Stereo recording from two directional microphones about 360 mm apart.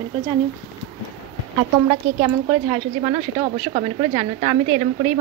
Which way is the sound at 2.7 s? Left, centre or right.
Centre.